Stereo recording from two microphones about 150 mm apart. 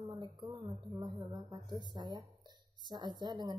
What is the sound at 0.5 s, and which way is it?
Speech, 20° right (ahead or behind).